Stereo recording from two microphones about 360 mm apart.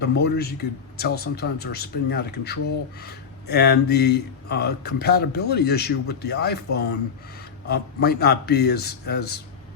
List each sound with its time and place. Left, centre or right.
0.0 s speech: left